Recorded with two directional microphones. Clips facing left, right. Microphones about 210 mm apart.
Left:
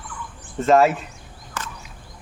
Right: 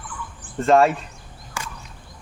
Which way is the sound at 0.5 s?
Centre (ahead or behind).